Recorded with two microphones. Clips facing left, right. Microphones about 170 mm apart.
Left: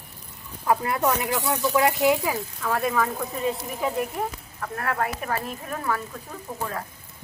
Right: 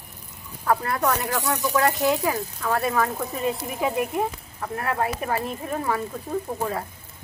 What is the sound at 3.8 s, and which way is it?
Speech, 15° right (ahead or behind).